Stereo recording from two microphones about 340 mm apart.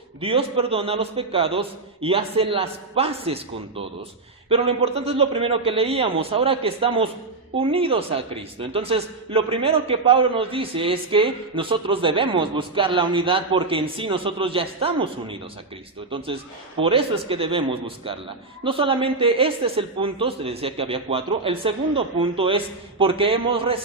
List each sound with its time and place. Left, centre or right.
0.2 s a man's voice: centre